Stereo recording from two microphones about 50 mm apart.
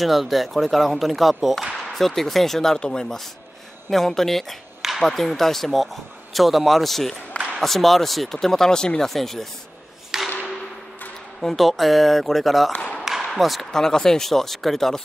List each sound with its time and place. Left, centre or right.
0.0 s speech: centre
10.1 s tap: centre
11.4 s speech: centre
12.7 s tap: left
13.0 s a sound: centre
13.3 s speech: centre